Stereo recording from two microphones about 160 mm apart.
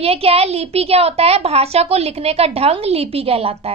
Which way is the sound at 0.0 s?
40° right (ahead or behind).